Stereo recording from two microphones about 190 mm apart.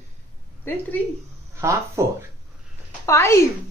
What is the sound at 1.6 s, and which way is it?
Speech, 15° right (ahead or behind).